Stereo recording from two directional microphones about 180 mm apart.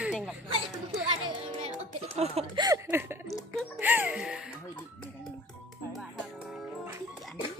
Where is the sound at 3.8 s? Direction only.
10° right (ahead or behind).